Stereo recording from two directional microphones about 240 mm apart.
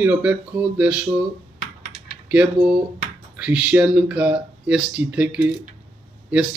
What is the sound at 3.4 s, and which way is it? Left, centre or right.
Speech, centre.